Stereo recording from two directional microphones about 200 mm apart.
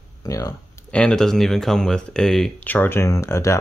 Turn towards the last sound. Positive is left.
turn(degrees=15)  # may be behind; listen again after turning